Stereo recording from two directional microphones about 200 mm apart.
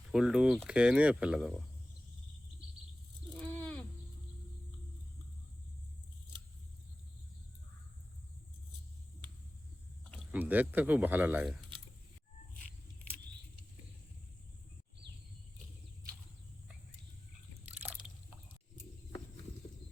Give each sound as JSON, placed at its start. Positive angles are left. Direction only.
{"t": 0.1, "sound": "speech", "side_deg": -5}
{"t": 3.4, "sound": "a sound", "side_deg": 10}
{"t": 10.3, "sound": "speech", "side_deg": -10}